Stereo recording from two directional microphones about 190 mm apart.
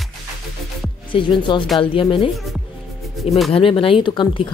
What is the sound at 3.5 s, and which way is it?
Speech, 30° left (ahead or behind).